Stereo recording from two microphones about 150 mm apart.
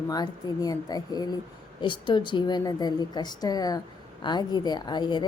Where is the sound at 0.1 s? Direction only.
25° left (ahead or behind).